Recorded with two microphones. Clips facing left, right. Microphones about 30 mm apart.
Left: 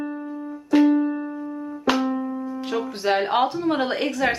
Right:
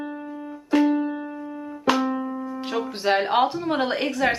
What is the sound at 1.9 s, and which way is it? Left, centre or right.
Music, centre.